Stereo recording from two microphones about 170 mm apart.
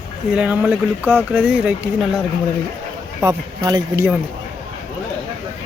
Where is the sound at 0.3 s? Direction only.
10° right (ahead or behind).